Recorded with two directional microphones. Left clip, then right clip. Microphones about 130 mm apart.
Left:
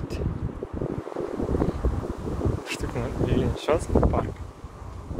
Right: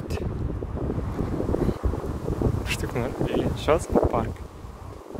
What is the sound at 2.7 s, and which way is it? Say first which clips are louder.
Speech: right 2 dB; 45° right (ahead or behind).